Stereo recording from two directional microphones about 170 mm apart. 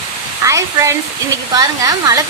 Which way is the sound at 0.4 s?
20° right (ahead or behind).